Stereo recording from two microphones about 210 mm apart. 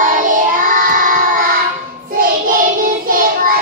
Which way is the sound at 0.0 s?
40° right (ahead or behind).